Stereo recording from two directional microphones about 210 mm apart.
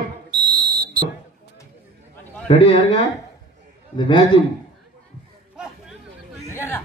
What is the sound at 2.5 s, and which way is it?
A man's voice, 30° left (ahead or behind).